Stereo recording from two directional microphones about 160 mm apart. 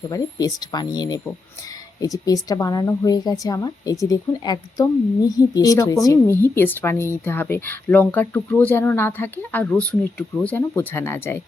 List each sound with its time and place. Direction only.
0.1 s a woman's voice: 25° left (ahead or behind)